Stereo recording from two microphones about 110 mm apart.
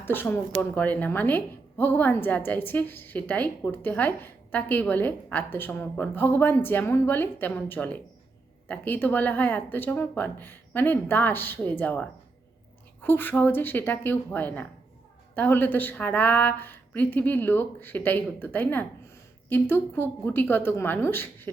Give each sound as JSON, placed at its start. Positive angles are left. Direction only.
{"t": 0.0, "sound": "a woman's voice", "side_deg": 20}